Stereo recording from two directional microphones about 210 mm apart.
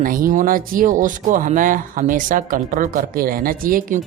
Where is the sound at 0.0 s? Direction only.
40° right (ahead or behind).